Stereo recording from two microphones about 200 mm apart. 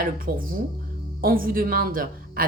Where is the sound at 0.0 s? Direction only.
45° right (ahead or behind).